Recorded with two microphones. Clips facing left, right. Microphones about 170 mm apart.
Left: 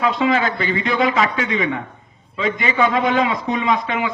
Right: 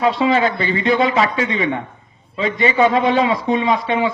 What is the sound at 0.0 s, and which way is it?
A man's voice, 30° right (ahead or behind).